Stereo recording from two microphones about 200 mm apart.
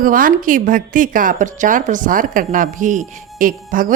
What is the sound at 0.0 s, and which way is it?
Speech, 45° right (ahead or behind).